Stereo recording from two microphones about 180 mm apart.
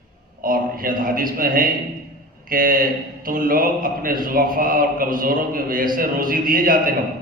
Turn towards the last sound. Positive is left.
turn(degrees=-50)  # may be behind; listen again after turning